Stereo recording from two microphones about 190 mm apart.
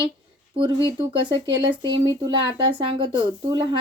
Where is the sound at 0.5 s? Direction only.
25° right (ahead or behind).